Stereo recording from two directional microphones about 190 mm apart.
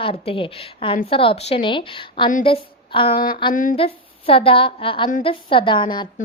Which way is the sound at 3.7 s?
30° left (ahead or behind).